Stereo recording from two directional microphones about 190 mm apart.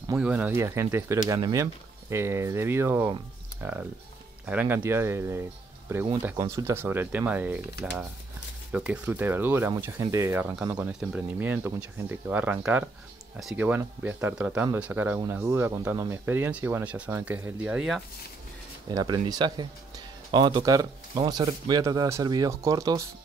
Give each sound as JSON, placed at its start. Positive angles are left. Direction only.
{"t": 0.2, "sound": "speech", "side_deg": -10}
{"t": 8.7, "sound": "speech", "side_deg": -5}
{"t": 18.9, "sound": "speech", "side_deg": -20}